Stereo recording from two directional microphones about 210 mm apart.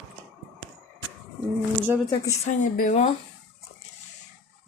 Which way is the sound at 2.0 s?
35° left (ahead or behind).